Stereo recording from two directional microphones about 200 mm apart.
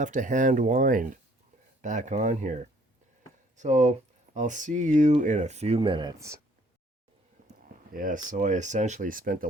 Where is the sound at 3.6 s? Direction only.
35° right (ahead or behind); by 6.4 s 15° right (ahead or behind).